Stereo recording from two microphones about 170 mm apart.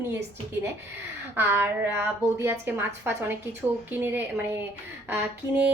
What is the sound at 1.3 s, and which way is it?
A woman's voice, 15° right (ahead or behind).